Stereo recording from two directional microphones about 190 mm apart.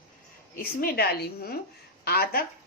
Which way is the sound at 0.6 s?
50° left (ahead or behind).